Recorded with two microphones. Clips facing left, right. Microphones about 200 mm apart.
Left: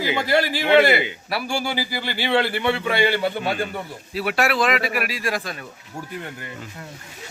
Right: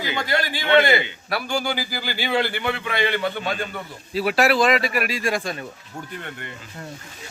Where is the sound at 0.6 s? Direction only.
10° left (ahead or behind).